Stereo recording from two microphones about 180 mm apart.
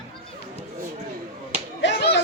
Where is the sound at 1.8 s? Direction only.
75° left (ahead or behind).